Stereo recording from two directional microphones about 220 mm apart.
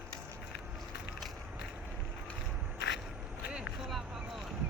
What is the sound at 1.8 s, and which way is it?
Vehicle, 5° right (ahead or behind).